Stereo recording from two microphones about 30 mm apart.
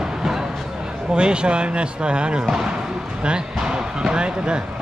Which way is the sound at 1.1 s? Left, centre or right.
Right.